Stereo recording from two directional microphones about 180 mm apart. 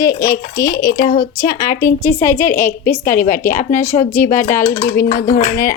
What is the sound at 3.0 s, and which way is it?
Speech, 45° left (ahead or behind).